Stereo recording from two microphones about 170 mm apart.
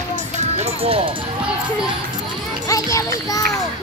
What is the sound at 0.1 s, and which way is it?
Music, 40° right (ahead or behind).